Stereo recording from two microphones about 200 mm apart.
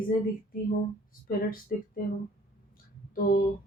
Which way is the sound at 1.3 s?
45° left (ahead or behind).